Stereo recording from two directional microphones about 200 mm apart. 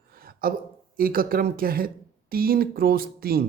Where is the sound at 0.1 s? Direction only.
45° right (ahead or behind).